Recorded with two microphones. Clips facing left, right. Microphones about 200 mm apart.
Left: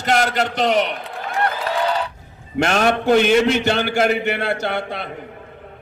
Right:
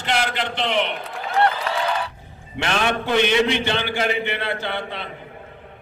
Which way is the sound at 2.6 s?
45° left (ahead or behind).